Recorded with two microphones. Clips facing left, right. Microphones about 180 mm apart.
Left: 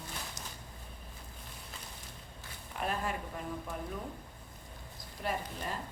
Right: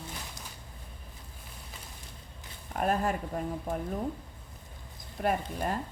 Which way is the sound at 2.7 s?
45° right (ahead or behind).